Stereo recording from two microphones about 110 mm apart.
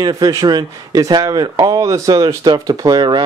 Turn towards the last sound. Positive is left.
turn(degrees=-40)  # may be behind; listen again after turning